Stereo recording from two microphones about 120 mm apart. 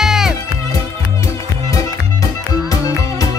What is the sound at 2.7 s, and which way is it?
Music, 30° left (ahead or behind).